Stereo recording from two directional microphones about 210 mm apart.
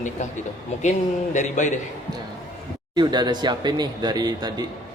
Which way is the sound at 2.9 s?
20° right (ahead or behind).